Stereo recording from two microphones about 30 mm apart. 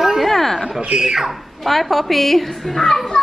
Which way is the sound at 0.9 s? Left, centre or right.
Centre.